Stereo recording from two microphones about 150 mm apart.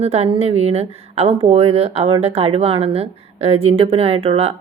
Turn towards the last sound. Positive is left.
turn(degrees=-40)  # may be behind; listen again after turning